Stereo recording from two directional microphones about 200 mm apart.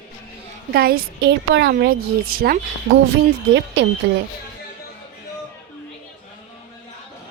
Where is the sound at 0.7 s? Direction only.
50° right (ahead or behind).